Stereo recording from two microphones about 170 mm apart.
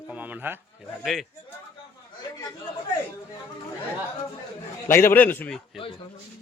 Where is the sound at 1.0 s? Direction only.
Centre (ahead or behind).